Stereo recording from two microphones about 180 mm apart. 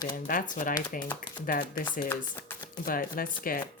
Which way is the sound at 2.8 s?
50° left (ahead or behind).